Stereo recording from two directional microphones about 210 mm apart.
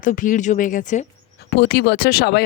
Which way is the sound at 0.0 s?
40° left (ahead or behind).